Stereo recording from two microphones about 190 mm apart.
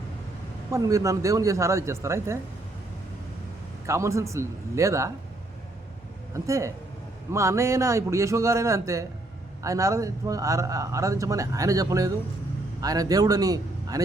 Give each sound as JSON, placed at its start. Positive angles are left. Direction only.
{"t": 0.7, "sound": "speech", "side_deg": -15}
{"t": 3.8, "sound": "speech", "side_deg": -15}
{"t": 6.3, "sound": "speech", "side_deg": -15}